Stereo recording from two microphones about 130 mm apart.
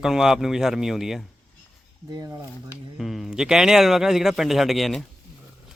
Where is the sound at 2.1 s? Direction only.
30° right (ahead or behind).